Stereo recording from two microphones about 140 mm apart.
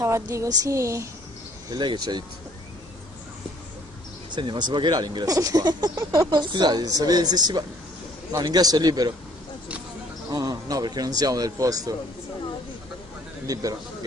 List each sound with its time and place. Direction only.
0.0 s speech: 20° right (ahead or behind)
1.7 s speech: 30° right (ahead or behind)
4.3 s speech: 35° right (ahead or behind)
10.3 s speech: 25° right (ahead or behind)
13.5 s speech: 25° right (ahead or behind)